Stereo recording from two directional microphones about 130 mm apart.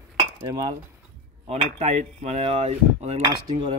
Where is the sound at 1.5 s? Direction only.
60° right (ahead or behind).